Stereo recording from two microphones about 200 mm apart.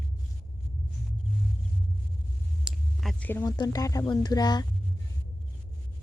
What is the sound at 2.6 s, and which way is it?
Speech, centre (ahead or behind).